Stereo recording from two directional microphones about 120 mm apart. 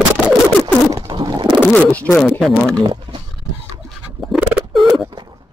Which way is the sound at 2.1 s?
Centre (ahead or behind).